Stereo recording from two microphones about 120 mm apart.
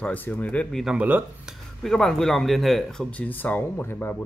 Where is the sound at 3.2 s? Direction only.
15° left (ahead or behind).